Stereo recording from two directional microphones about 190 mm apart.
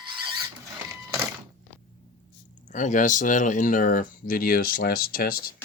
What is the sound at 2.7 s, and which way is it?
Speech, 40° left (ahead or behind).